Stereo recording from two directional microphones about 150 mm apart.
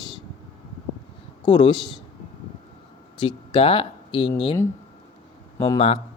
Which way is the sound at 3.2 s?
35° left (ahead or behind).